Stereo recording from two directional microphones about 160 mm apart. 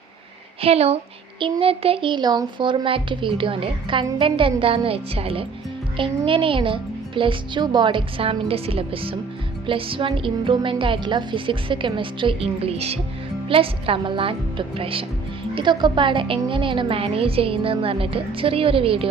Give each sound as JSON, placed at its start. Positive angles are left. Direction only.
{"t": 0.6, "sound": "speech", "side_deg": -40}